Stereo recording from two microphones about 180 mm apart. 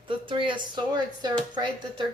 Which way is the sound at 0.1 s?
30° right (ahead or behind).